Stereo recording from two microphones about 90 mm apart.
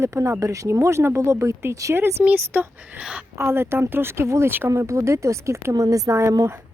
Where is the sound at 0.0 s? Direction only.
35° right (ahead or behind).